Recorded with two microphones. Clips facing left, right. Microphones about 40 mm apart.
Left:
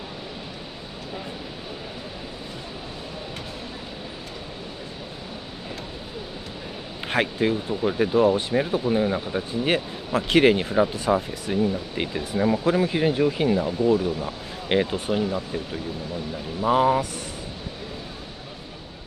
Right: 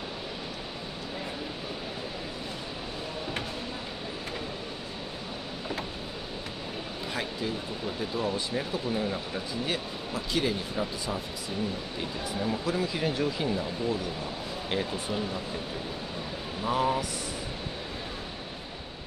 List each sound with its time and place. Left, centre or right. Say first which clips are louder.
7.1 s speech: left 11 dB; left
9.5 s speech: left 9 dB; left
12.8 s speech: left 7 dB; left
15.2 s speech: left 6 dB; centre
16.6 s speech: left 8 dB; left